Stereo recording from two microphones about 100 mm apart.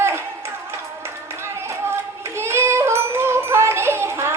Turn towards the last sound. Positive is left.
turn(degrees=-25)  # may be behind; listen again after turning